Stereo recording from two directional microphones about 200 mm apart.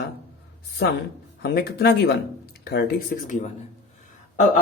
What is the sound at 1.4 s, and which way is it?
Speech, 55° left (ahead or behind).